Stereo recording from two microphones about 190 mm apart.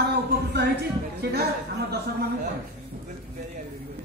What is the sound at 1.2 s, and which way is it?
Speech, 55° right (ahead or behind).